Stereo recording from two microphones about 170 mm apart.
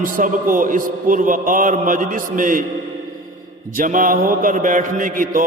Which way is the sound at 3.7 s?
50° right (ahead or behind).